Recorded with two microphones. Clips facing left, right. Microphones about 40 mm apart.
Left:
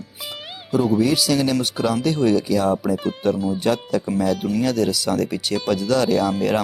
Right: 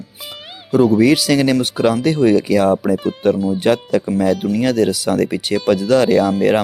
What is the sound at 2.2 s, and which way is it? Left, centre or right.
Speech, right.